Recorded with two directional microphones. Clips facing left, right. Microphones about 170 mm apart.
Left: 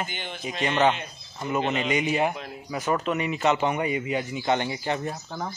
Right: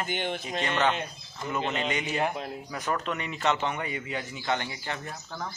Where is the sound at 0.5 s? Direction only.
10° left (ahead or behind).